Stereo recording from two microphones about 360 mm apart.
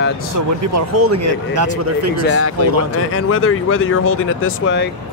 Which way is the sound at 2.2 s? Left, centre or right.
Left.